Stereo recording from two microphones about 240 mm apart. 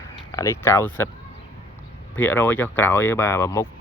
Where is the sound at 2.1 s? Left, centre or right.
Centre.